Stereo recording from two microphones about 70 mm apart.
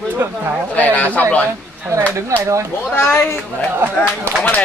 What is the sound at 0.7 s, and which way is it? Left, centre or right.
Speech, centre.